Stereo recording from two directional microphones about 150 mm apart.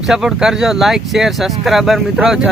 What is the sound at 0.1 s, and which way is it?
Speech, 5° right (ahead or behind).